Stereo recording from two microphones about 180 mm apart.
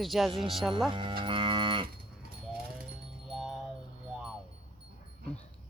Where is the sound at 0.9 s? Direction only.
25° right (ahead or behind).